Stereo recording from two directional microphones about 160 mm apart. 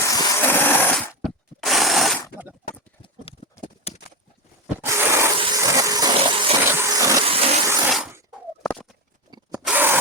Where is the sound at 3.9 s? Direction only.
40° left (ahead or behind).